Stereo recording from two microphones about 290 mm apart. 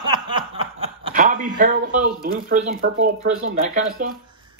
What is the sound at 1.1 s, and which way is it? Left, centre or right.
Speech, right.